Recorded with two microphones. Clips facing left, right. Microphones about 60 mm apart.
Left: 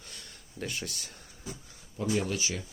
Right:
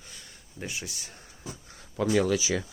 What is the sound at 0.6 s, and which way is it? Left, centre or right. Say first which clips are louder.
Speech: even; centre.